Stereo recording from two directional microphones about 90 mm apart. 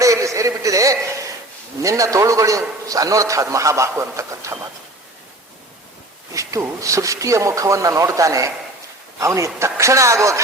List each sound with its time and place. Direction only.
0.0 s a sound: 35° right (ahead or behind)
1.8 s a man's voice: 40° right (ahead or behind)
6.3 s a man's voice: 35° right (ahead or behind)